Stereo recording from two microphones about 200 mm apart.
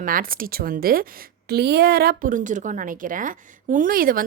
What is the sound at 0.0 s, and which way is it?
Speech, 45° right (ahead or behind).